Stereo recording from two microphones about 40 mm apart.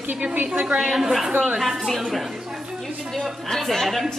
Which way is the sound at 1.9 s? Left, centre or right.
Centre.